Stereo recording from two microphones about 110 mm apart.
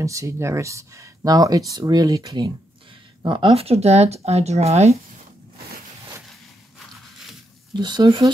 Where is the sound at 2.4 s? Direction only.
50° right (ahead or behind); by 4.9 s 75° right (ahead or behind).